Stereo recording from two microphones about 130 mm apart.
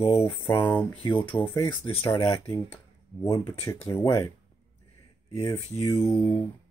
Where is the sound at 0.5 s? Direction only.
15° left (ahead or behind).